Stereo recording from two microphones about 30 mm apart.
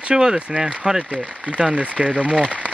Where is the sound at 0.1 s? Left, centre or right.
Right.